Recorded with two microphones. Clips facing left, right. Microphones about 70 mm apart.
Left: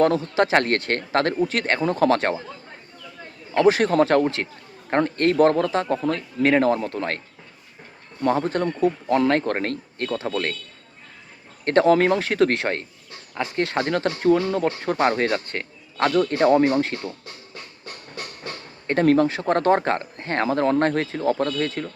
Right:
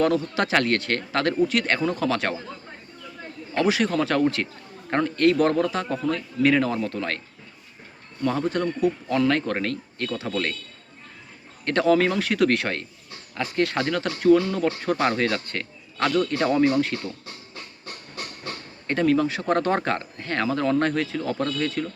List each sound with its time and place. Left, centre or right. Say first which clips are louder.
0.0 s speech: left 3 dB; left
3.5 s speech: left 5 dB; left
8.2 s speech: left 3 dB; left
11.6 s speech: left 3 dB; left
18.9 s speech: left 3 dB; left
19.3 s speech: left 3 dB; left